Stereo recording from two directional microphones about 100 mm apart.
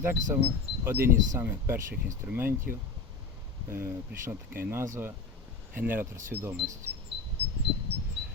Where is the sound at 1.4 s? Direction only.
25° right (ahead or behind).